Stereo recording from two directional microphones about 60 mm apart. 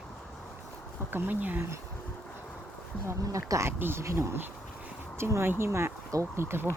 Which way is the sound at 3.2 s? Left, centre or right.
Right.